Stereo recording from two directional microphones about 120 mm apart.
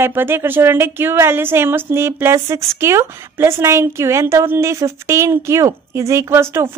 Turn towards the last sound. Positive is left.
turn(degrees=-20)  # may be behind; listen again after turning